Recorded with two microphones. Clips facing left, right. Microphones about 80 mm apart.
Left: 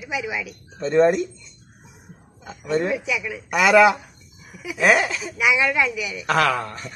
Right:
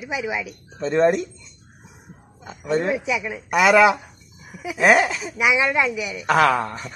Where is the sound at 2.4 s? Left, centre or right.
Centre.